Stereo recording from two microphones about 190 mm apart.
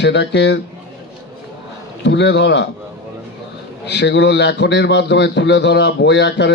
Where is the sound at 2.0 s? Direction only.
65° left (ahead or behind).